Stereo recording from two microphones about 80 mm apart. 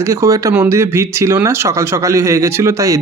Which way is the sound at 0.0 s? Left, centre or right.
Right.